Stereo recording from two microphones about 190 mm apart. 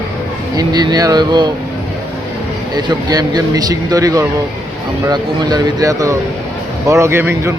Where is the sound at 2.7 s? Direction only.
20° right (ahead or behind).